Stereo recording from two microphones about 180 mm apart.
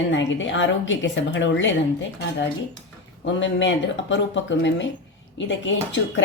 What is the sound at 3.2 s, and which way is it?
Speech, 90° left.